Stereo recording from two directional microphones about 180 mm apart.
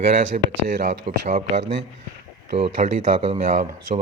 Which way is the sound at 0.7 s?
70° right (ahead or behind).